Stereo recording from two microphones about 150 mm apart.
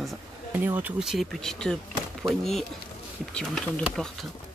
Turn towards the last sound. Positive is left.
turn(degrees=5)  # may be behind; listen again after turning